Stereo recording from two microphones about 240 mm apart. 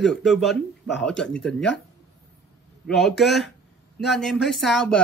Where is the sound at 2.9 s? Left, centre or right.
Centre.